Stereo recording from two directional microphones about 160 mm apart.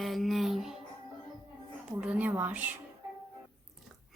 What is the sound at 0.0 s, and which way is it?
Music, centre (ahead or behind).